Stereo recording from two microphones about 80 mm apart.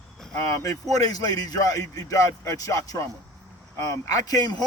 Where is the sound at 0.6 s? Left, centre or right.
Left.